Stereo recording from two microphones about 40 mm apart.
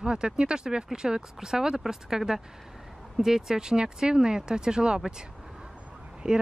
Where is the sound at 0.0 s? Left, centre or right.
Right.